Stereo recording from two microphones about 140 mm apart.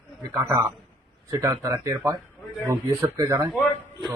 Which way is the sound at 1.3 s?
20° right (ahead or behind).